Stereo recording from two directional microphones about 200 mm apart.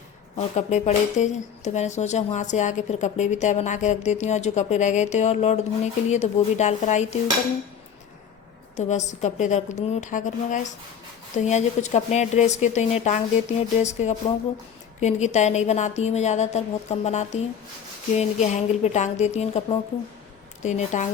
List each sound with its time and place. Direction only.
0.3 s speech: 35° left (ahead or behind)
8.9 s speech: 35° left (ahead or behind)